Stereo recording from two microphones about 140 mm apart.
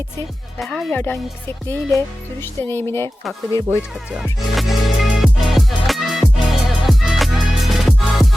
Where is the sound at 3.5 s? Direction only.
20° left (ahead or behind).